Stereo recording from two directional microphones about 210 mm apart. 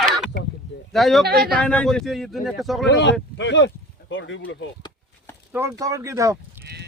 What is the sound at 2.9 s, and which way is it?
Speech, 55° left (ahead or behind).